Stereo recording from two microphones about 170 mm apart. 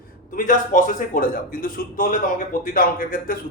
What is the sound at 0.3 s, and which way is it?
A man's voice, 50° left (ahead or behind).